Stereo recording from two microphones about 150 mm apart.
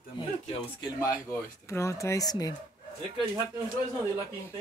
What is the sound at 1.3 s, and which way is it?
Speech, 20° left (ahead or behind).